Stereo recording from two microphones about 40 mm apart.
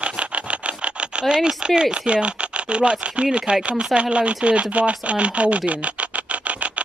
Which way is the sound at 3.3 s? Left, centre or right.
Right.